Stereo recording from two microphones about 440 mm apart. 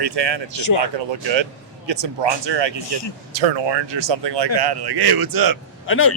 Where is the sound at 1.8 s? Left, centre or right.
Right.